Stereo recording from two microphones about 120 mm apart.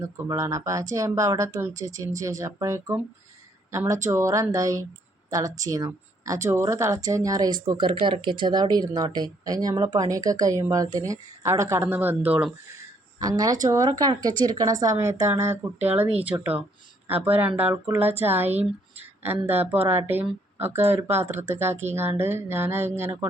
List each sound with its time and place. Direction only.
0.0 s speech: 25° right (ahead or behind)
13.1 s a woman's voice: 30° right (ahead or behind)
19.5 s speech: 55° right (ahead or behind)
19.9 s a woman's voice: 20° right (ahead or behind)